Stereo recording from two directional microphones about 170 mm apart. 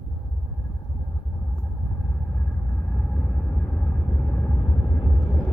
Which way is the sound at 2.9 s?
10° left (ahead or behind).